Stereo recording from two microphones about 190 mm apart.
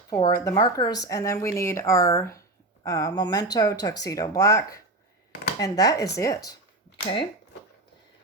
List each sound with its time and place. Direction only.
0.1 s speech: 20° left (ahead or behind)